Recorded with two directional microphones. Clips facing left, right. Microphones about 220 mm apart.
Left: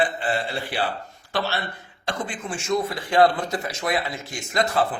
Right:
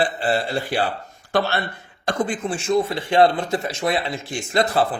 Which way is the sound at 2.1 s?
45° right (ahead or behind).